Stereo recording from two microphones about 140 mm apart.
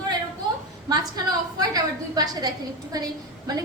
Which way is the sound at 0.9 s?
30° right (ahead or behind).